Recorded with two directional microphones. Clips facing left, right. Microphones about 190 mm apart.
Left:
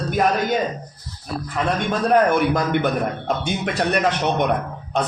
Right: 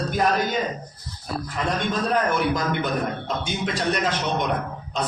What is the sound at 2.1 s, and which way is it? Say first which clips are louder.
A man's voice: left 7 dB; 55° left (ahead or behind).